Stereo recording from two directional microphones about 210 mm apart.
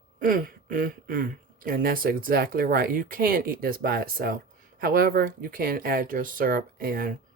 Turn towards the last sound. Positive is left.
turn(degrees=-45)  # may be behind; listen again after turning